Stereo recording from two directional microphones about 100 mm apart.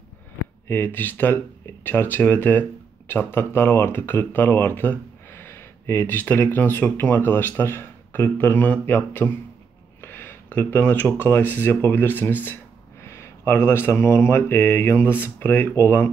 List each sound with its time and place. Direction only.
0.7 s speech: 20° left (ahead or behind)